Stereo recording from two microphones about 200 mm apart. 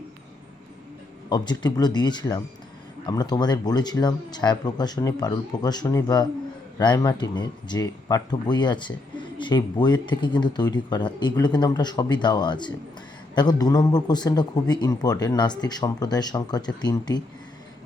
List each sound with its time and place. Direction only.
1.3 s speech: 20° left (ahead or behind)